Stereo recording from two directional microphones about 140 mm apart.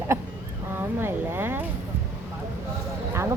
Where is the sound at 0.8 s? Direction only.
15° right (ahead or behind).